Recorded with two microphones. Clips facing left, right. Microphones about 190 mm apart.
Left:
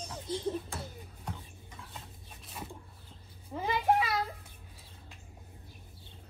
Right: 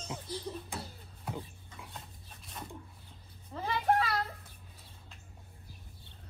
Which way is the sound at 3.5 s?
10° left (ahead or behind).